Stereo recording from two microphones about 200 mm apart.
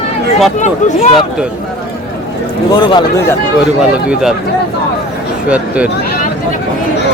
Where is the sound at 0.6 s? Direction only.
35° left (ahead or behind).